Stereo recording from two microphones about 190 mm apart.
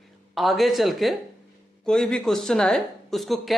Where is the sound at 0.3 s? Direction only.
Centre (ahead or behind).